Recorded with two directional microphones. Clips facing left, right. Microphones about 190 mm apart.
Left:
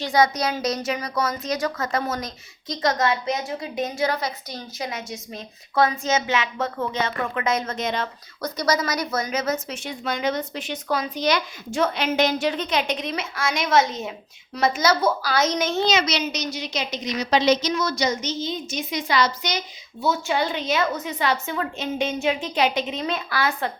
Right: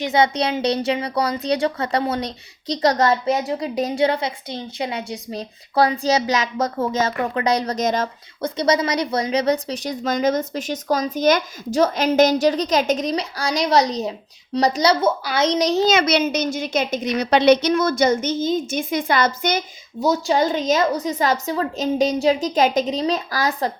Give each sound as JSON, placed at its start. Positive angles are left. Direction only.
{"t": 0.0, "sound": "a woman's voice", "side_deg": -25}
{"t": 8.4, "sound": "a woman's voice", "side_deg": -30}
{"t": 15.9, "sound": "a woman's voice", "side_deg": -55}